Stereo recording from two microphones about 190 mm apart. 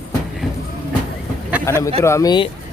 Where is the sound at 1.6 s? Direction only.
15° left (ahead or behind).